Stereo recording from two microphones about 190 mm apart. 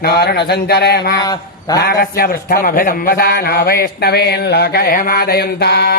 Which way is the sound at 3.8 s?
55° left (ahead or behind).